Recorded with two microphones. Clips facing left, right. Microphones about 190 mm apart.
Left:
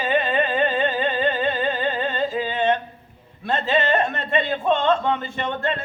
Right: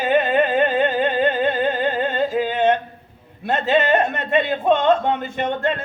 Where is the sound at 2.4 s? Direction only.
45° right (ahead or behind).